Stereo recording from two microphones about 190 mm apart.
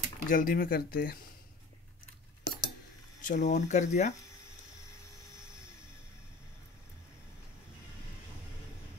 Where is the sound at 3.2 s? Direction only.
40° left (ahead or behind).